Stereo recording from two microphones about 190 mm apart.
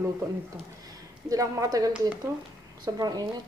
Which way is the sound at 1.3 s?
20° right (ahead or behind).